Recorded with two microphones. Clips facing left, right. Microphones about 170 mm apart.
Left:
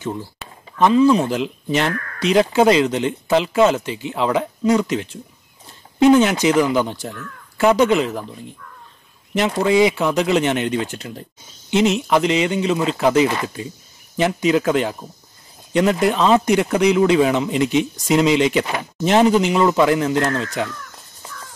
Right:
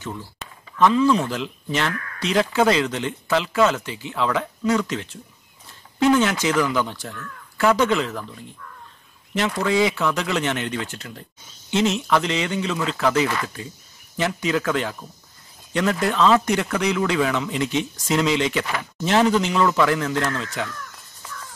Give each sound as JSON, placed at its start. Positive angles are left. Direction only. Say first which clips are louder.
{"t": 0.7, "sound": "speech", "louder": "left 4 dB", "side_deg": 20}
{"t": 9.3, "sound": "speech", "louder": "left 5 dB", "side_deg": 20}